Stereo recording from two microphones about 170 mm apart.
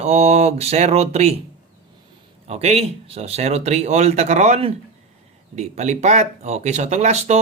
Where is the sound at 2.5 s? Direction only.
40° right (ahead or behind).